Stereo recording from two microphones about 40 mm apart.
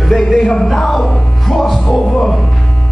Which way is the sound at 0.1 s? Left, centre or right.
Centre.